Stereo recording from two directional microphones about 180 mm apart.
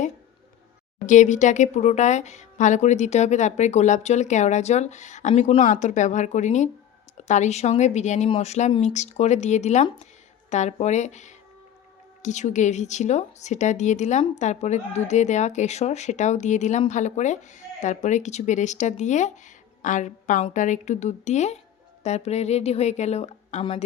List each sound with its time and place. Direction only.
1.0 s a woman's voice: 45° left (ahead or behind)